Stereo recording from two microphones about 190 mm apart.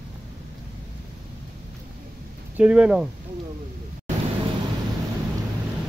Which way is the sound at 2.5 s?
5° right (ahead or behind).